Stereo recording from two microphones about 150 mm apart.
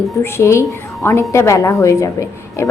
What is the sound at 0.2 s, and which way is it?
A woman's voice, 15° left (ahead or behind).